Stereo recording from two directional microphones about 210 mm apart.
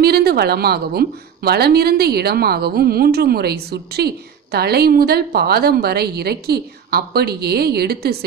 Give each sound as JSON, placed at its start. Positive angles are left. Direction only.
{"t": 0.0, "sound": "a woman's voice", "side_deg": -50}